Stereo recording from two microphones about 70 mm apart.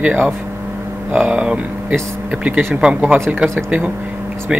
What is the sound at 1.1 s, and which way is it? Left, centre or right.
Speech, centre.